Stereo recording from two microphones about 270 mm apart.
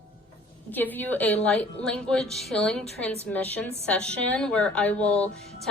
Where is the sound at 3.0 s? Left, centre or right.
Left.